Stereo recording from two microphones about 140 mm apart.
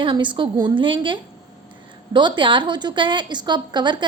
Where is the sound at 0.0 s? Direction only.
35° right (ahead or behind).